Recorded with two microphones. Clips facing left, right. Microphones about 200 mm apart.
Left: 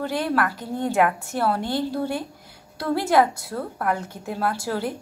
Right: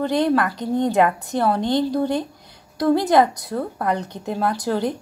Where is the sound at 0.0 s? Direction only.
20° right (ahead or behind).